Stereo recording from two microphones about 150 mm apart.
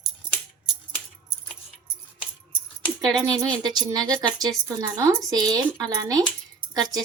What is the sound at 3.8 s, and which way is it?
A woman's voice, 25° right (ahead or behind).